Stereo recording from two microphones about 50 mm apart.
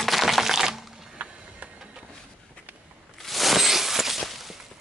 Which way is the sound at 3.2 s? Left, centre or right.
Centre.